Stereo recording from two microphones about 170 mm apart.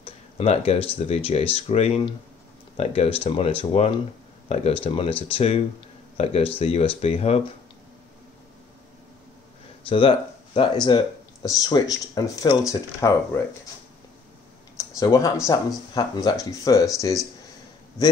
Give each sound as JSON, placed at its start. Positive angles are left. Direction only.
{"t": 0.0, "sound": "speech", "side_deg": 35}
{"t": 9.8, "sound": "speech", "side_deg": 30}
{"t": 14.8, "sound": "a sound", "side_deg": 20}
{"t": 15.4, "sound": "speech", "side_deg": 25}